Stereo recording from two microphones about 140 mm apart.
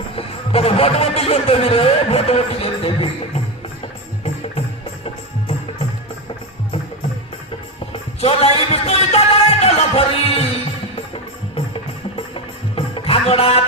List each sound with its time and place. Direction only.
0.2 s a man's voice: 45° left (ahead or behind)
8.2 s music: 45° left (ahead or behind)
11.5 s music: 40° left (ahead or behind)